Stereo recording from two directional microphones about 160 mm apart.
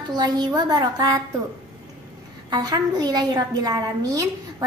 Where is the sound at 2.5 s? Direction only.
25° right (ahead or behind).